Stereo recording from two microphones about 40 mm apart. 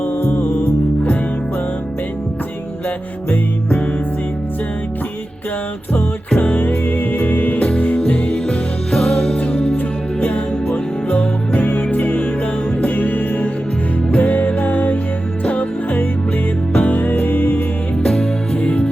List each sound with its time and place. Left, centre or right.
0.0 s music: left
5.9 s music: left
8.4 s music: centre; by 17.6 s left
18.0 s music: left